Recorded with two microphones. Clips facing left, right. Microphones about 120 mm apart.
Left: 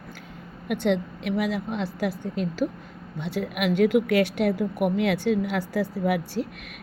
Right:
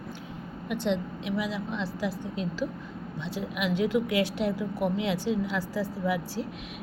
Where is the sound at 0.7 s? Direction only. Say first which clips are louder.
Left 5 dB; 60° left (ahead or behind).